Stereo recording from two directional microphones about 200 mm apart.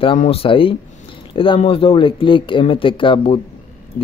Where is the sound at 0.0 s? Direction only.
30° left (ahead or behind).